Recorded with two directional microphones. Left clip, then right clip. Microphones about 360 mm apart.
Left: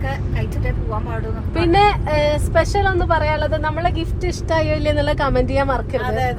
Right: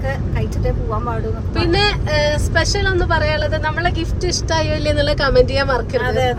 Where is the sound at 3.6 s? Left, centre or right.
Centre.